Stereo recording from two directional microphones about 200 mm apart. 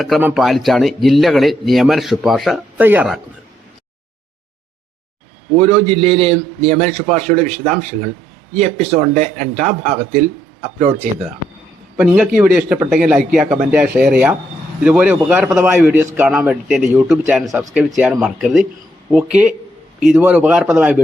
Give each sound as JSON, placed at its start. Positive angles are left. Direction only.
{"t": 0.0, "sound": "speech", "side_deg": -5}
{"t": 5.5, "sound": "a man's voice", "side_deg": -30}
{"t": 11.9, "sound": "speech", "side_deg": -5}